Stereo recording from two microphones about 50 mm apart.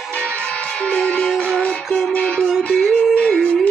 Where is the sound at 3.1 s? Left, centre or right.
Left.